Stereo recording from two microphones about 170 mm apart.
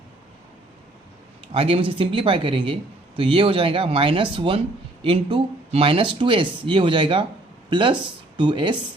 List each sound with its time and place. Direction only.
1.5 s speech: 35° right (ahead or behind)